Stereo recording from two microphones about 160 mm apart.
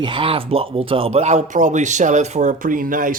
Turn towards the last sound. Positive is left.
turn(degrees=-55)  # may be behind; listen again after turning